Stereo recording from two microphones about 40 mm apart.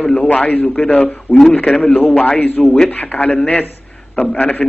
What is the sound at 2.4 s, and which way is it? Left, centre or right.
A man's voice, left.